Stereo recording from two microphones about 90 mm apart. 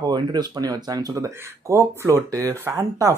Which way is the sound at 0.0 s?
50° right (ahead or behind).